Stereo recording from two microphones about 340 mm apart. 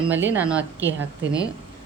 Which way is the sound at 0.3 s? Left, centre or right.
Centre.